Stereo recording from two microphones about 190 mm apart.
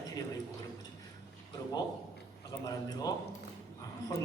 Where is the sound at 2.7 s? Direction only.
20° left (ahead or behind).